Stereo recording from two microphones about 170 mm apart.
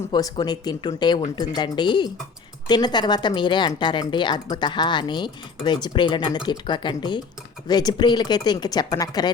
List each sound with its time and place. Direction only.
0.1 s speech: 25° left (ahead or behind)